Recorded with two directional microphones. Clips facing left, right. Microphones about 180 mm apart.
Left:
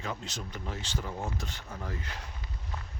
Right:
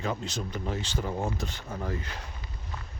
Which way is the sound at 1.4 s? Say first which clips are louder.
Right 5 dB; 20° right (ahead or behind).